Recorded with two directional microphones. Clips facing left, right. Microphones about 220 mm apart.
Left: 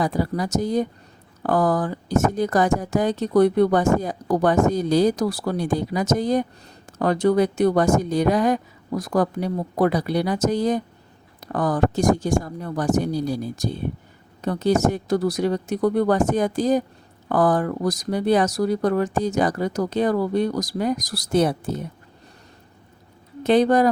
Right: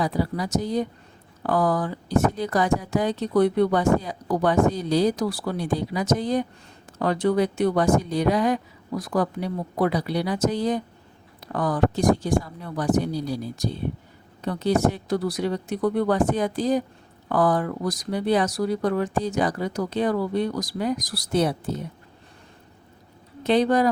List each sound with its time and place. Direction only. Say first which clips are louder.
0.0 s speech: left 2 dB; 45° left (ahead or behind)
23.4 s speech: left 3 dB; 45° left (ahead or behind)